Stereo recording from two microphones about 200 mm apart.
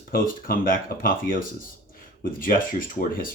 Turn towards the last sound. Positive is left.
turn(degrees=45)  # may be behind; listen again after turning